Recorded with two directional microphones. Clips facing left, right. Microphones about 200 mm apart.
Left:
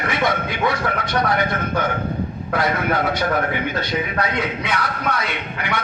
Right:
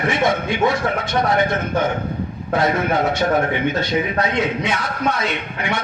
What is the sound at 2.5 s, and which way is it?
A man's voice, 25° right (ahead or behind).